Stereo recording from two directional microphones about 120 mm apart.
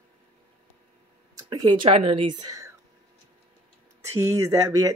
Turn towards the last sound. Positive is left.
turn(degrees=-25)  # may be behind; listen again after turning